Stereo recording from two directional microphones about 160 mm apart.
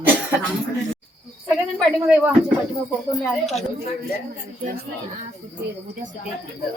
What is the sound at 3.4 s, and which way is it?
Speech, centre (ahead or behind).